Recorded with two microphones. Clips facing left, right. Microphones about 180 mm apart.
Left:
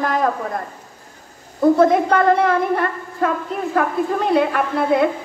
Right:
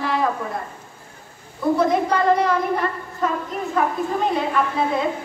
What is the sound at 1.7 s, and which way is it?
A woman's voice, 55° left (ahead or behind).